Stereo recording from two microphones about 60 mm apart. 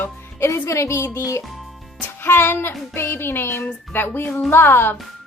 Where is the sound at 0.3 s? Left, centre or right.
Left.